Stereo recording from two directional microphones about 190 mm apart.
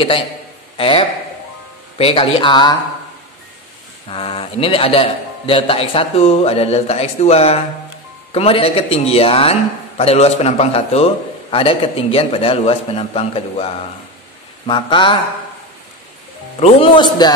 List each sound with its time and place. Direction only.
0.7 s a man's voice: 30° left (ahead or behind)
4.1 s a man's voice: 30° left (ahead or behind)
16.6 s a man's voice: 25° left (ahead or behind)